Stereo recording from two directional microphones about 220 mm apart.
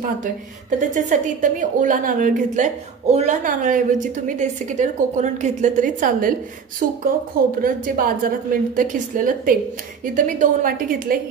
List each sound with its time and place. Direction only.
0.2 s a woman's voice: 35° right (ahead or behind)